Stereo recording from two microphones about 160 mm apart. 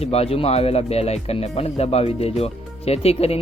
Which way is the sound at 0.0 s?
40° left (ahead or behind).